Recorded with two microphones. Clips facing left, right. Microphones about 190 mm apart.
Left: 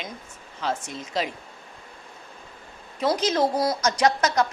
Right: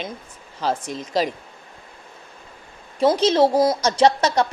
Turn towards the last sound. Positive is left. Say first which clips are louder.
# right 4 dB
turn(degrees=-30)  # may be behind; listen again after turning